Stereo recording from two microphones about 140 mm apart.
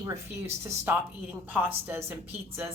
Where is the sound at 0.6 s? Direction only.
15° right (ahead or behind).